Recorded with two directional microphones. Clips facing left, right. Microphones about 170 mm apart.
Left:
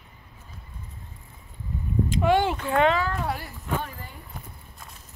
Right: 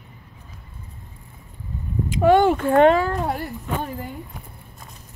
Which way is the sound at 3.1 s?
40° right (ahead or behind).